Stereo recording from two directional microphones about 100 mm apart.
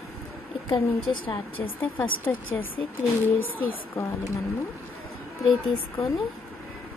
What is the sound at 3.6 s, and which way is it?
Speech, 25° left (ahead or behind).